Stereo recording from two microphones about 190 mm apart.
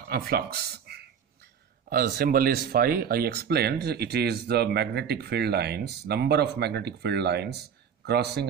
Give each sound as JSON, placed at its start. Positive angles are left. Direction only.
{"t": 0.1, "sound": "speech", "side_deg": -55}